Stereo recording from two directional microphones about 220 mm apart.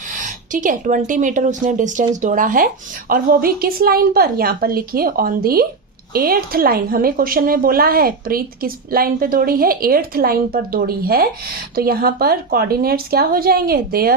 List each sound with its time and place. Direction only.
0.2 s a woman's voice: 35° right (ahead or behind)